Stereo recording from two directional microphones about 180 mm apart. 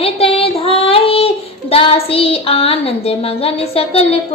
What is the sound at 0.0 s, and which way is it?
Child singing, 30° left (ahead or behind).